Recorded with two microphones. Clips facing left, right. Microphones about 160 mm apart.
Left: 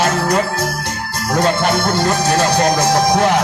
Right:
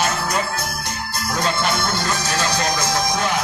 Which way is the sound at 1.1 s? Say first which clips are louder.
Left 7 dB; 60° left (ahead or behind).